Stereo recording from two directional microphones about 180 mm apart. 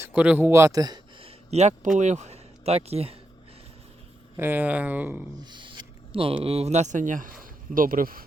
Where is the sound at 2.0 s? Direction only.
40° right (ahead or behind).